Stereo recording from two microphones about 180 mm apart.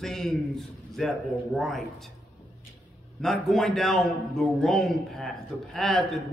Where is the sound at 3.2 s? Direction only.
Centre (ahead or behind).